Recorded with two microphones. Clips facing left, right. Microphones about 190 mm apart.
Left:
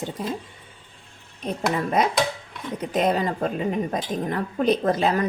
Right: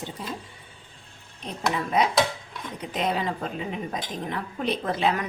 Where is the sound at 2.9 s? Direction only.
45° left (ahead or behind).